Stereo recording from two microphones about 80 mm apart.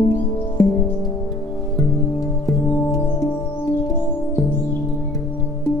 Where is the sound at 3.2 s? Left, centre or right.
Left.